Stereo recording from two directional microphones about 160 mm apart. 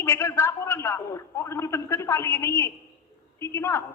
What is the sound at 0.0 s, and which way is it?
A man's voice, 15° left (ahead or behind).